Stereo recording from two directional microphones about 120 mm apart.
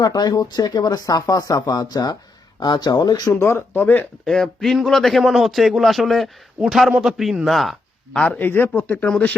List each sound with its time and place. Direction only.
0.0 s speech: 30° left (ahead or behind)
3.3 s speech: 20° left (ahead or behind)
4.3 s a man's voice: 5° left (ahead or behind)